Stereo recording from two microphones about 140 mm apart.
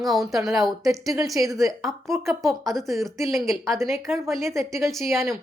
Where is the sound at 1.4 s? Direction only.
20° right (ahead or behind).